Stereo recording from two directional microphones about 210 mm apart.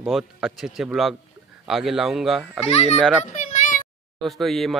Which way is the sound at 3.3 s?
35° left (ahead or behind).